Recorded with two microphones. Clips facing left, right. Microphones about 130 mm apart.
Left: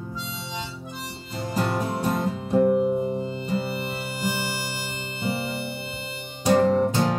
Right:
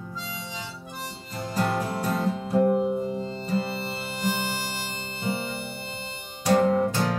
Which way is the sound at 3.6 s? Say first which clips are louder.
Left 1 dB; 30° right (ahead or behind).